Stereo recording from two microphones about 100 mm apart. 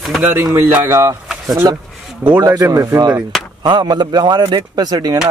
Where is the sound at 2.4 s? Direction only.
30° right (ahead or behind).